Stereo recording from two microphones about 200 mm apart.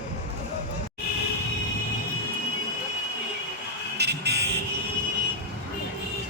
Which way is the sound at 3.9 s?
55° right (ahead or behind).